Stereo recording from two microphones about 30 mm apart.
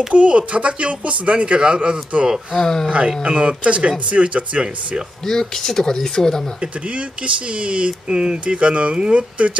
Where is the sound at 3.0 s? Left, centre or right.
Right.